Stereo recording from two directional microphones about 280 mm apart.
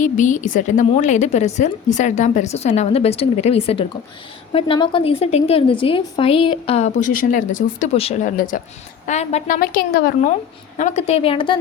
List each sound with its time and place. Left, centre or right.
0.0 s a woman's voice: left